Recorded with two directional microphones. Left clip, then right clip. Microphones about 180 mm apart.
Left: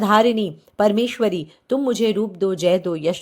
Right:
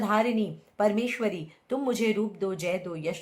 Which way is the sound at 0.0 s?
40° left (ahead or behind).